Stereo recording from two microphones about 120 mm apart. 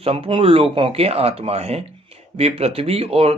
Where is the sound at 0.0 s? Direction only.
50° right (ahead or behind).